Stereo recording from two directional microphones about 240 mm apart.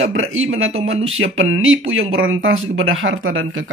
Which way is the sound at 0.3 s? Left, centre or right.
Right.